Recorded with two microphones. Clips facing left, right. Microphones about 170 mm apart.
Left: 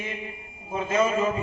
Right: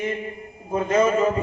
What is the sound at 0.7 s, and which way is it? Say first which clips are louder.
Speech: right 4 dB; 45° right (ahead or behind).